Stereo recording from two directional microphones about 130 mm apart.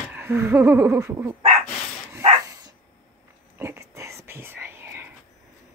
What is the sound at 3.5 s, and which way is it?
Whispering, 20° right (ahead or behind).